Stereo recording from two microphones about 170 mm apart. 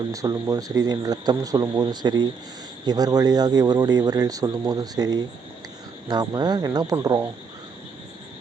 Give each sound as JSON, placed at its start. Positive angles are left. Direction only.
{"t": 0.1, "sound": "speech", "side_deg": -20}